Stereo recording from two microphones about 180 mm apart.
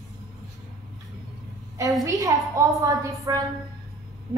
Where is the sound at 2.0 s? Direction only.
20° right (ahead or behind).